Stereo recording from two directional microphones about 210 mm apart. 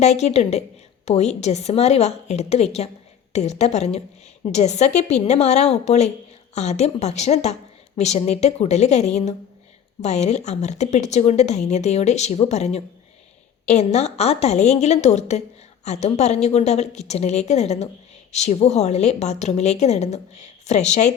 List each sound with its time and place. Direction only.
0.0 s speech: 30° left (ahead or behind)